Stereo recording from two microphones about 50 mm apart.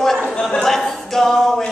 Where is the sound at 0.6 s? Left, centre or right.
Centre.